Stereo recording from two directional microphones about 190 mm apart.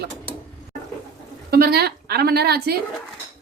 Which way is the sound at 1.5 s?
55° right (ahead or behind).